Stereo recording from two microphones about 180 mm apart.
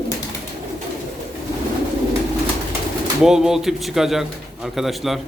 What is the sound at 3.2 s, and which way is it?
Speech, 5° right (ahead or behind).